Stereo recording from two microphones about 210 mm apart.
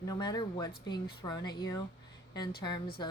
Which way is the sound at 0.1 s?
20° left (ahead or behind).